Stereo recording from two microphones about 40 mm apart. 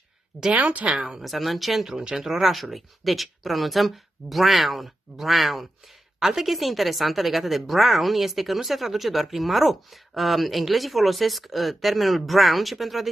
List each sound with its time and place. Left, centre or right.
0.6 s speech: right
0.9 s speech: centre
1.2 s a woman's voice: centre
2.0 s a woman's voice: centre